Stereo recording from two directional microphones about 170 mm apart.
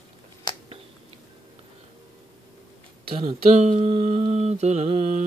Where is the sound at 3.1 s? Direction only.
40° right (ahead or behind).